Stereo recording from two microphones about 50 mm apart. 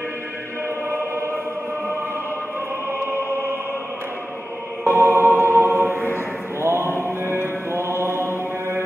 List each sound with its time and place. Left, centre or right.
0.8 s choir: right
2.9 s music: right
4.8 s music: right
6.6 s a sound: right
7.2 s music: right